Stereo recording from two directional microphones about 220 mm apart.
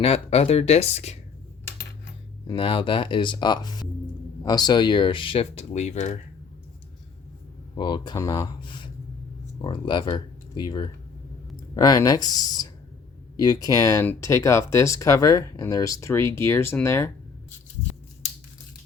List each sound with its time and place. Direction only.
0.0 s speech: 25° left (ahead or behind)
2.5 s speech: 25° left (ahead or behind)
7.8 s speech: 20° left (ahead or behind)